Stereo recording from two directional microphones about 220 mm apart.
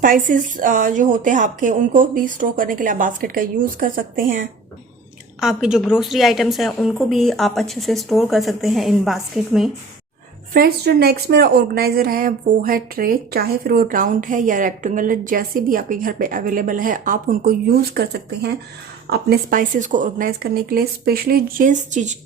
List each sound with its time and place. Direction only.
0.0 s speech: 40° right (ahead or behind)
5.4 s a woman's voice: 5° right (ahead or behind)
10.5 s speech: 45° right (ahead or behind)